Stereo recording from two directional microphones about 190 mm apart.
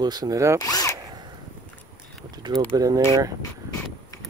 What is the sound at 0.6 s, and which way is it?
Zipper, 20° left (ahead or behind).